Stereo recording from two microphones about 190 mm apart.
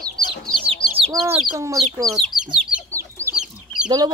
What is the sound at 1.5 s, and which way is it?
Speech, 15° right (ahead or behind).